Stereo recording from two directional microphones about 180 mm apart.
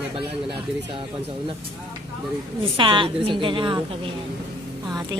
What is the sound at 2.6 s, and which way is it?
Music, 30° right (ahead or behind).